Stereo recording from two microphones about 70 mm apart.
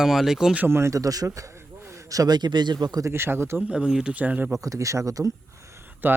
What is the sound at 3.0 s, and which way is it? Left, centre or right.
Speech, right.